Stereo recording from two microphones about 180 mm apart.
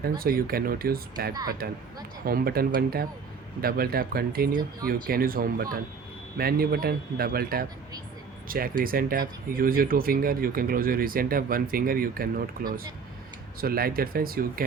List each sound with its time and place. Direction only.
0.0 s speech: 55° right (ahead or behind)
13.6 s speech: 55° right (ahead or behind)